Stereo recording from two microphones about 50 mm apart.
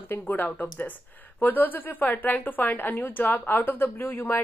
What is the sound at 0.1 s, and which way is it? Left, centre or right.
A woman's voice, left.